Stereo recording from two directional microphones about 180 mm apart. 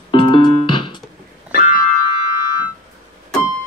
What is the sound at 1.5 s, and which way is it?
Music, 50° left (ahead or behind).